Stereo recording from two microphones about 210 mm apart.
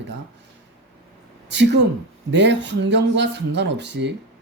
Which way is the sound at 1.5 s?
55° right (ahead or behind).